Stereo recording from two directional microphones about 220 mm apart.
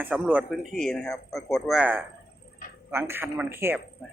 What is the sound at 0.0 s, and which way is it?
A man's voice, 5° right (ahead or behind).